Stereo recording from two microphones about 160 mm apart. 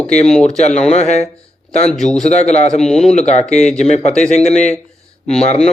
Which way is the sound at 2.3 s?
45° left (ahead or behind).